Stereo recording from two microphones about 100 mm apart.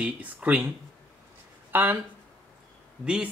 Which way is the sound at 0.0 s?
15° right (ahead or behind).